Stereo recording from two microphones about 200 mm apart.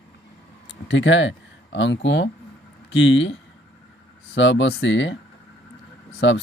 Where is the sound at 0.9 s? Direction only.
65° left (ahead or behind).